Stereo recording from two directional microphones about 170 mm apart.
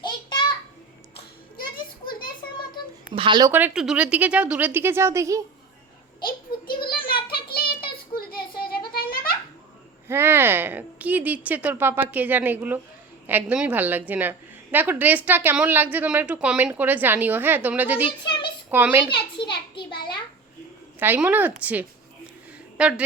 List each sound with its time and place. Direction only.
0.0 s a sound: 30° left (ahead or behind)
1.5 s music: 55° left (ahead or behind)
3.2 s speech: 25° right (ahead or behind)
3.5 s a woman's voice: 5° right (ahead or behind)
6.8 s a sound: 60° left (ahead or behind)
10.1 s a woman's voice: 15° right (ahead or behind)
18.0 s a woman's voice: 30° left (ahead or behind)
18.7 s a woman's voice: 10° right (ahead or behind)
19.4 s a sound: 30° left (ahead or behind)
21.0 s a woman's voice: 10° right (ahead or behind)